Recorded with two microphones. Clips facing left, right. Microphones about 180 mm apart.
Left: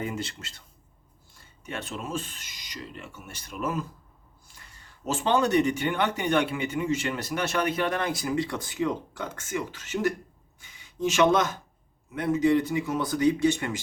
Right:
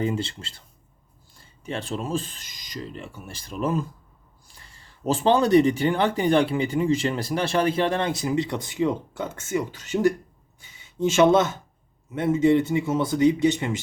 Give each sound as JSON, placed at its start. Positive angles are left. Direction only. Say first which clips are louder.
{"t": 0.0, "sound": "speech", "louder": "right 6 dB", "side_deg": -30}
{"t": 5.0, "sound": "speech", "louder": "right 4 dB", "side_deg": -35}